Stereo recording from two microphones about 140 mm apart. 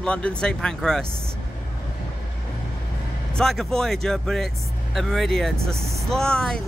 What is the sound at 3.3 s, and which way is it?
Speech, 5° left (ahead or behind).